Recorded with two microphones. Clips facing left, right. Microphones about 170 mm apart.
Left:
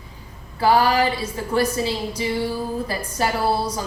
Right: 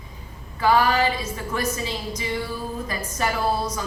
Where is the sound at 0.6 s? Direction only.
35° left (ahead or behind).